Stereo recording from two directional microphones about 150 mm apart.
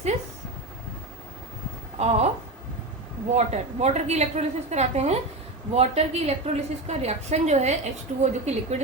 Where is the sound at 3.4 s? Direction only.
50° right (ahead or behind).